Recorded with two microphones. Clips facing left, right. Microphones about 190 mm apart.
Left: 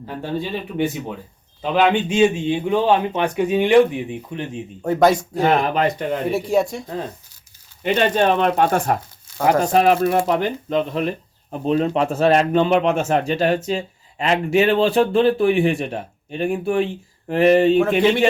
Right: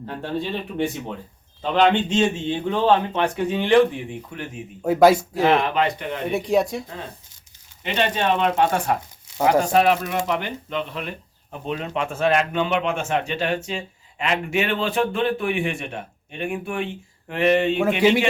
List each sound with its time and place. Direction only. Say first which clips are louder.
0.0 s a man's voice: left 2 dB; 5° left (ahead or behind); by 4.6 s 25° left (ahead or behind)
4.8 s speech: right 1 dB; 5° right (ahead or behind)
5.5 s speech: left 2 dB; 40° left (ahead or behind)
6.3 s speech: right 2 dB; centre (ahead or behind)
7.9 s speech: left 4 dB; 45° left (ahead or behind)